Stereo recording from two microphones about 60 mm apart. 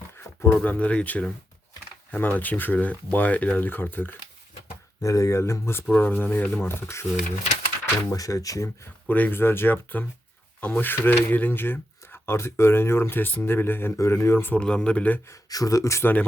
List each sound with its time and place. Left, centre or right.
0.2 s a sound: left
0.6 s speech: left
5.0 s speech: left
6.0 s speech: left
8.1 s speech: left
9.0 s speech: left
14.0 s speech: left
14.5 s speech: centre
15.3 s speech: left